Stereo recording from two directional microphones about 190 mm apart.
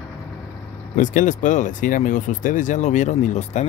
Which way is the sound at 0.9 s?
40° left (ahead or behind).